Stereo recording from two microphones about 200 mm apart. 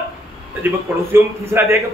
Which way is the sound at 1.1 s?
10° right (ahead or behind).